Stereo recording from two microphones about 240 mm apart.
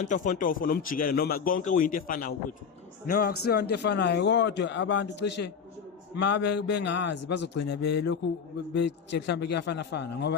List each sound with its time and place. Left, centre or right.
0.0 s a man's voice: left